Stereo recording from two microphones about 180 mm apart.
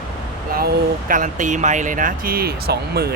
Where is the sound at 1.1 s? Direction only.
45° right (ahead or behind).